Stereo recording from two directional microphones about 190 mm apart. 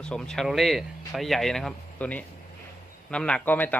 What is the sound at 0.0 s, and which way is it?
A man's voice, 5° left (ahead or behind).